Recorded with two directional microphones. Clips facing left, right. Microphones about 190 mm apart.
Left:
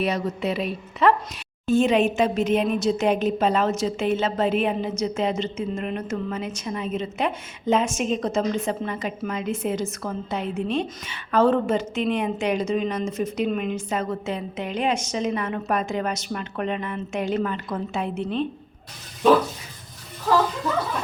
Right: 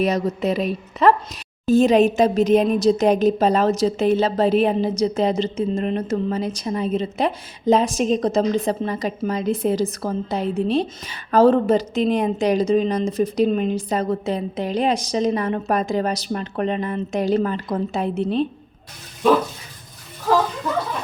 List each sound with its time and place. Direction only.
0.0 s a woman's voice: 40° right (ahead or behind)